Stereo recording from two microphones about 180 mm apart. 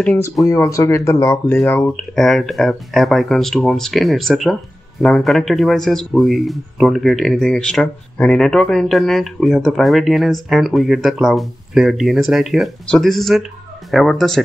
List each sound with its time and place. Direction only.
0.0 s speech: 10° left (ahead or behind)
1.6 s speech: 5° left (ahead or behind)